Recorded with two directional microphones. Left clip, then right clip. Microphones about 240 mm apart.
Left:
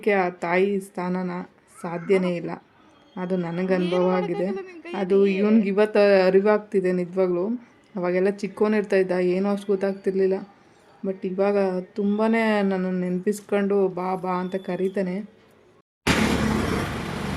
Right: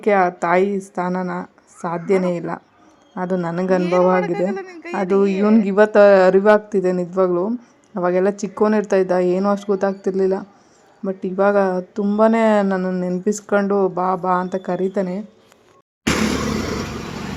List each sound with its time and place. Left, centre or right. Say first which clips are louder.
0.0 s a man's voice: right 6 dB; centre
4.9 s speech: right 3 dB; centre